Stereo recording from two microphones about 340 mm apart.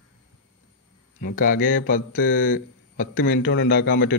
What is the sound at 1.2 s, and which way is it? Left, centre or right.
Speech, left.